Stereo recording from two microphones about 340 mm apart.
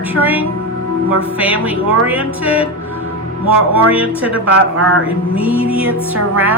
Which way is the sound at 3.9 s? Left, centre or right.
Centre.